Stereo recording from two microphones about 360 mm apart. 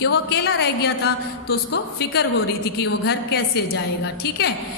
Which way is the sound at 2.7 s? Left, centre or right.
Left.